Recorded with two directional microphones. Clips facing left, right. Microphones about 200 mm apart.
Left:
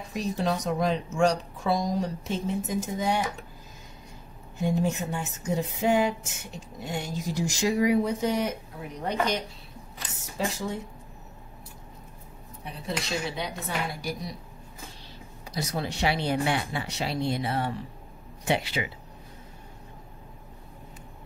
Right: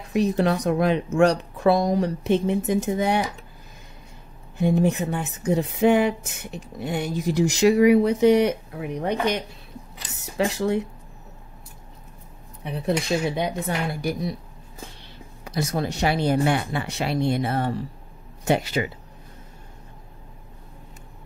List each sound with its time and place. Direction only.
0.1 s speech: 65° right (ahead or behind)
4.6 s speech: 60° right (ahead or behind)
12.6 s speech: 60° right (ahead or behind)
15.4 s speech: 55° right (ahead or behind)